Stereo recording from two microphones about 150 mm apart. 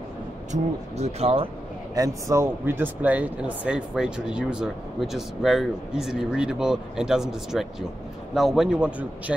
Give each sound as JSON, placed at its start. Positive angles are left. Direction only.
{"t": 0.5, "sound": "speech", "side_deg": -45}
{"t": 2.0, "sound": "speech", "side_deg": -20}